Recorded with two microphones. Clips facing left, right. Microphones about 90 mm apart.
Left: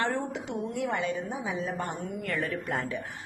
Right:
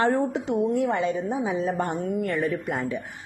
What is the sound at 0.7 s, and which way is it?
A woman's voice, 30° right (ahead or behind).